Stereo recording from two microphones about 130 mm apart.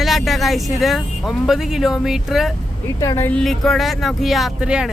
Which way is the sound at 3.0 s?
25° left (ahead or behind).